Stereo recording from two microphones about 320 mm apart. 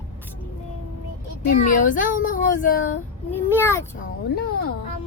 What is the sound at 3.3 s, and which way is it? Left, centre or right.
Speech, centre.